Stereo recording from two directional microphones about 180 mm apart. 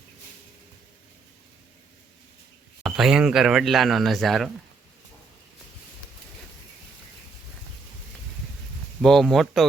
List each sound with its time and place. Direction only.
2.8 s speech: centre (ahead or behind)
9.0 s speech: centre (ahead or behind)